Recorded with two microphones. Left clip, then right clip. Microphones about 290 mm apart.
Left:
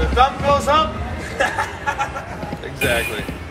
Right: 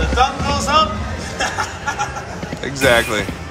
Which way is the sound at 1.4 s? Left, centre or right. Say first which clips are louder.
Left 1 dB; left.